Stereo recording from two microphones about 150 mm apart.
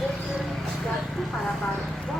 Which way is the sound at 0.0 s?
Centre (ahead or behind).